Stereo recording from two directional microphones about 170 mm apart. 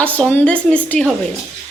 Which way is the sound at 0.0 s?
10° left (ahead or behind).